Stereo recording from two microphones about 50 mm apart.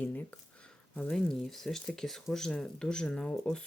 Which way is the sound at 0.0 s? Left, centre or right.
Left.